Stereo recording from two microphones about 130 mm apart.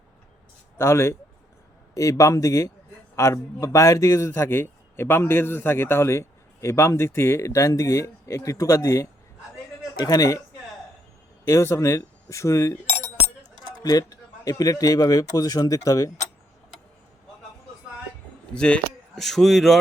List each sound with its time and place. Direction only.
0.8 s a man's voice: 20° left (ahead or behind)
11.4 s a man's voice: 20° left (ahead or behind)
18.5 s speech: 5° left (ahead or behind)